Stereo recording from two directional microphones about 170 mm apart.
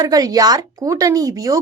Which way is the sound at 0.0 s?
20° right (ahead or behind).